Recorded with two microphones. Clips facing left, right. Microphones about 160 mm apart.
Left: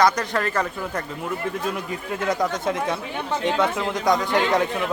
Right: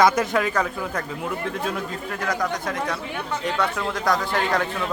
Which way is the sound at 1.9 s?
20° left (ahead or behind).